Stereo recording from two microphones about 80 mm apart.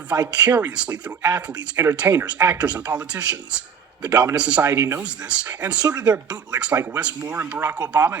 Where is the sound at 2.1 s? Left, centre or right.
Right.